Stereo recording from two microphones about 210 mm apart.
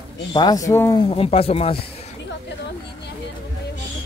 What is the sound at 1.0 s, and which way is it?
Speech, 25° left (ahead or behind).